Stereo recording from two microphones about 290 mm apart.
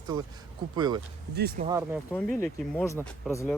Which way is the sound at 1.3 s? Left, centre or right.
Right.